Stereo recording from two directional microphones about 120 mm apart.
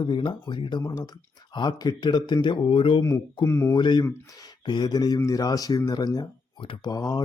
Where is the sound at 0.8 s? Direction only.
30° left (ahead or behind).